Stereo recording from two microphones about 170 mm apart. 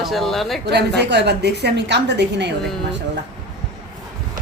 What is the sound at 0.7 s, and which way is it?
A woman's voice, 80° right.